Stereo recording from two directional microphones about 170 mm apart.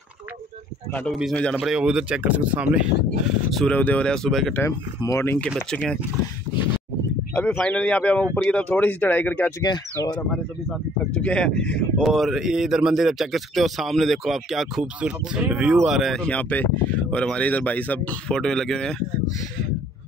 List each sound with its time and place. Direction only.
1.1 s speech: centre (ahead or behind)
4.6 s speech: 15° left (ahead or behind)
7.3 s speech: 10° left (ahead or behind)
9.6 s speech: 20° left (ahead or behind)
11.1 s speech: 5° left (ahead or behind)